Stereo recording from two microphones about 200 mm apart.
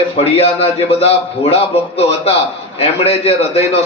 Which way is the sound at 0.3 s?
30° left (ahead or behind).